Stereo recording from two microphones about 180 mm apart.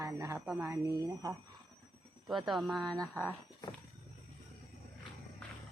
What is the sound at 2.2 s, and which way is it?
Speech, centre (ahead or behind).